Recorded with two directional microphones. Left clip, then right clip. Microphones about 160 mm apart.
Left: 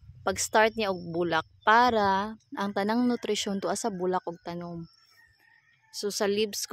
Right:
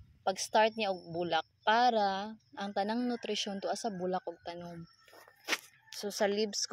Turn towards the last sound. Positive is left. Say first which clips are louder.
# left 4 dB
turn(degrees=50)  # may be behind; listen again after turning